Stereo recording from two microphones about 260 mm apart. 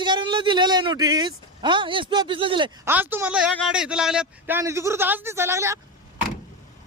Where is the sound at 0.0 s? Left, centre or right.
Centre.